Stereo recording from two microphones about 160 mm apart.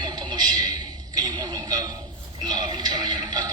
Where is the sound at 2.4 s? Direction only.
25° right (ahead or behind).